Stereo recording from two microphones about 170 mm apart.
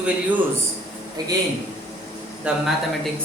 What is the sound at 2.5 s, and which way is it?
Speech, 5° right (ahead or behind).